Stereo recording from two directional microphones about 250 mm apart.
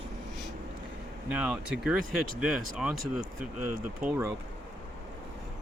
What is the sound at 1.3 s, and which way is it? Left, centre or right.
Speech, centre.